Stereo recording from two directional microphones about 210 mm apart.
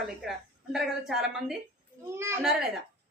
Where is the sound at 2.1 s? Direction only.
15° right (ahead or behind).